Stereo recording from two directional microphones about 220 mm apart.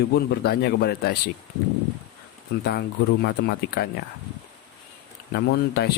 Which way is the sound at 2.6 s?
45° left (ahead or behind).